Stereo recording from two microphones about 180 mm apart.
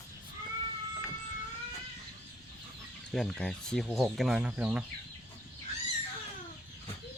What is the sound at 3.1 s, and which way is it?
Speech, centre (ahead or behind).